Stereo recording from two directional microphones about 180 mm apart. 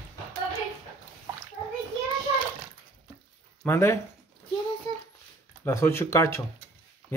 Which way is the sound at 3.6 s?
15° left (ahead or behind).